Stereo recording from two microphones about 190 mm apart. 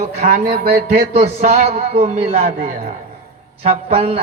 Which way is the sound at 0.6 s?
50° right (ahead or behind).